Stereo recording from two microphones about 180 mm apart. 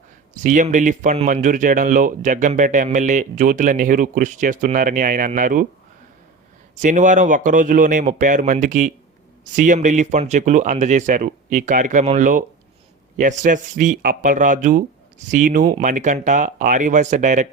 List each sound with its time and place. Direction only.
0.4 s speech: 45° right (ahead or behind)
6.7 s speech: 45° right (ahead or behind)